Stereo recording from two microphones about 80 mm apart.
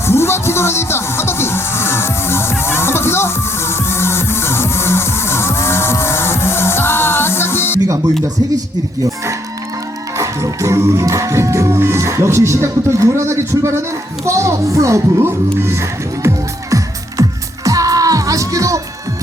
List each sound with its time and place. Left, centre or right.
0.0 s music: left
10.2 s music: right